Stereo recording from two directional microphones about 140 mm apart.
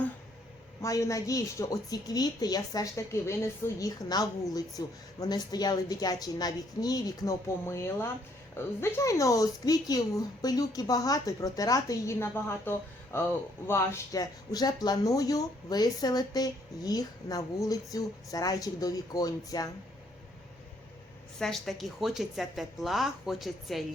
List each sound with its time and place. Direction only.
0.8 s speech: 25° left (ahead or behind)
21.3 s speech: 5° left (ahead or behind)